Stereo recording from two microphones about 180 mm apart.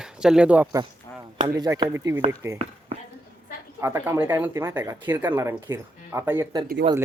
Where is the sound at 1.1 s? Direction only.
20° left (ahead or behind).